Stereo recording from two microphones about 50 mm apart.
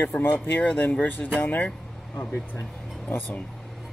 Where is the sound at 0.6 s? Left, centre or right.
Left.